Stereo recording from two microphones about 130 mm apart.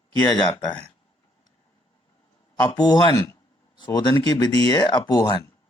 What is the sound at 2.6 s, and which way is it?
Speech, 30° left (ahead or behind).